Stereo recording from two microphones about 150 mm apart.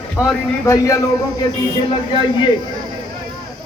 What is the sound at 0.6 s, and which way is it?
Speech, 20° left (ahead or behind).